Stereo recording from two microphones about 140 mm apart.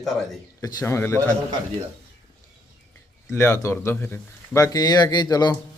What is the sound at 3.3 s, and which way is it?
Speech, 15° left (ahead or behind).